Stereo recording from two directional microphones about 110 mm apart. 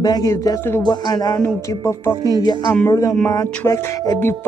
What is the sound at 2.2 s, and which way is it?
Music, 35° right (ahead or behind).